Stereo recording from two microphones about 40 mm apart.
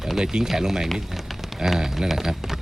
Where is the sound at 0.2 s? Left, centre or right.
Centre.